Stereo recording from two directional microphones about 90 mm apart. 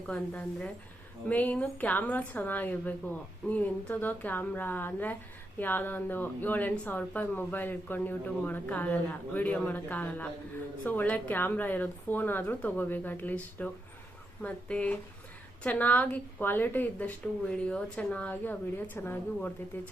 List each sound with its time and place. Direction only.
0.1 s speech: 10° left (ahead or behind)